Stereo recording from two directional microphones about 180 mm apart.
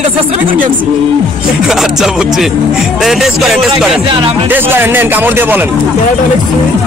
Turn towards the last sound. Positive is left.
turn(degrees=-10)  # may be behind; listen again after turning